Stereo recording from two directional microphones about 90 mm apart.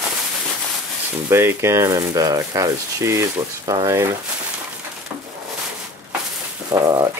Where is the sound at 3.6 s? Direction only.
50° right (ahead or behind).